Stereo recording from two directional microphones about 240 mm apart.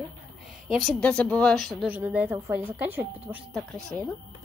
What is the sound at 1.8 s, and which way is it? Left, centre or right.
A woman's voice, centre.